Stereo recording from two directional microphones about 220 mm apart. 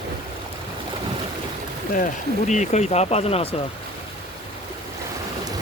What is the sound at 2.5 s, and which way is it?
Speech, 30° left (ahead or behind).